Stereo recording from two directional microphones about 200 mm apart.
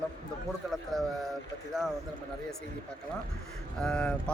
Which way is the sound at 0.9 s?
Centre (ahead or behind).